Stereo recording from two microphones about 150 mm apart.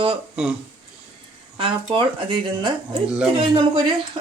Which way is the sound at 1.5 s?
35° right (ahead or behind).